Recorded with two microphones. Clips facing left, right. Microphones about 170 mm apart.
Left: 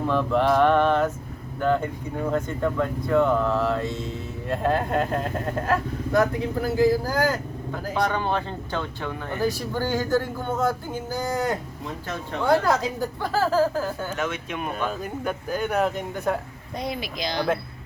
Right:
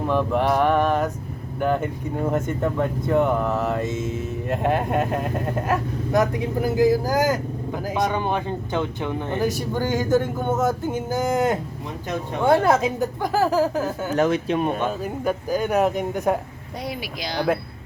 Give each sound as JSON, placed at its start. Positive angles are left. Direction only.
{"t": 0.1, "sound": "a man's voice", "side_deg": -15}
{"t": 14.2, "sound": "speech", "side_deg": -35}
{"t": 14.8, "sound": "speech", "side_deg": -5}